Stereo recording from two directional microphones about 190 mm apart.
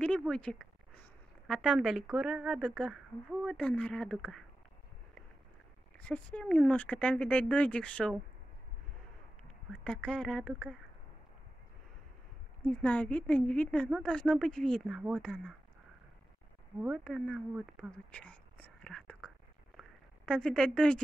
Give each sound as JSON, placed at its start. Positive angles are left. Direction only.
{"t": 0.2, "sound": "a woman's voice", "side_deg": 5}
{"t": 5.9, "sound": "speech", "side_deg": 5}
{"t": 9.4, "sound": "speech", "side_deg": 5}
{"t": 12.6, "sound": "a woman's voice", "side_deg": 5}
{"t": 15.2, "sound": "a woman's voice", "side_deg": 5}
{"t": 17.0, "sound": "a woman's voice", "side_deg": 0}
{"t": 18.1, "sound": "whispering", "side_deg": 5}
{"t": 19.8, "sound": "a sound", "side_deg": 5}